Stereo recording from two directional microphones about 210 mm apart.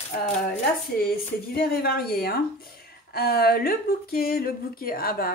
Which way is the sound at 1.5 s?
45° left (ahead or behind).